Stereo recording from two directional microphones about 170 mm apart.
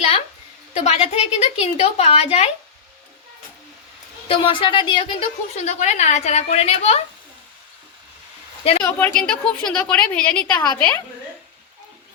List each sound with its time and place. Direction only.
0.9 s a woman's voice: 40° left (ahead or behind)
4.3 s a woman's voice: 30° left (ahead or behind)
8.8 s a woman's voice: 15° left (ahead or behind)